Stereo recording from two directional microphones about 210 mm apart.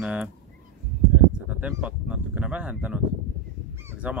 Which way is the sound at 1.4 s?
5° right (ahead or behind).